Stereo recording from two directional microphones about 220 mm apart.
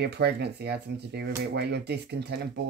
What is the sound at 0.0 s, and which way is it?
Speech, 50° right (ahead or behind).